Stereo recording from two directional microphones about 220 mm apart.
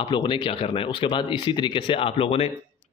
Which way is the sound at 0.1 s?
20° left (ahead or behind).